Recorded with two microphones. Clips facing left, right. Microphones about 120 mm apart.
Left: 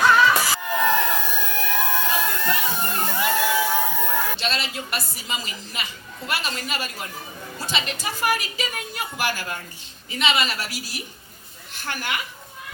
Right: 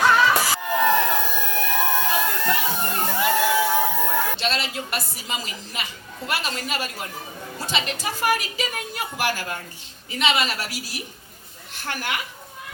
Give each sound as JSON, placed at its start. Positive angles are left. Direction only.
{"t": 0.0, "sound": "music", "side_deg": -35}
{"t": 2.7, "sound": "a sound", "side_deg": -40}
{"t": 4.9, "sound": "a woman's voice", "side_deg": -45}
{"t": 10.2, "sound": "a woman's voice", "side_deg": -50}
{"t": 11.9, "sound": "speech", "side_deg": -40}